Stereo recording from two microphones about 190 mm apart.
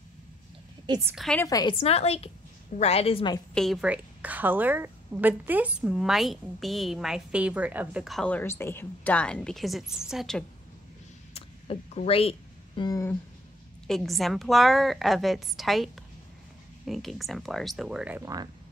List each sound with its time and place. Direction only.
0.8 s a woman's voice: 20° right (ahead or behind)
1.1 s a woman's voice: centre (ahead or behind)
1.4 s a woman's voice: 20° left (ahead or behind)
3.5 s a woman's voice: centre (ahead or behind)
11.3 s a sound: 30° left (ahead or behind); by 13.2 s 15° left (ahead or behind)
13.8 s a woman's voice: centre (ahead or behind); by 18.5 s 15° right (ahead or behind)